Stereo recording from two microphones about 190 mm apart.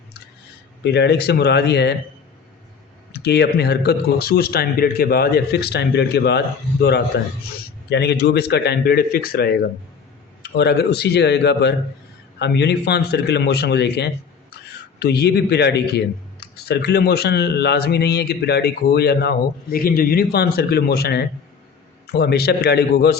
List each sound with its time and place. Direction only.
0.9 s a man's voice: 60° left (ahead or behind)
3.1 s a man's voice: 60° left (ahead or behind)